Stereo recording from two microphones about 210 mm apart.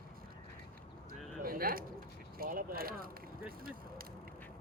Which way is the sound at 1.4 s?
45° right (ahead or behind).